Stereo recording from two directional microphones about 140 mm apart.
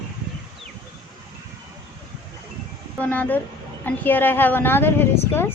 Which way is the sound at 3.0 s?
10° left (ahead or behind).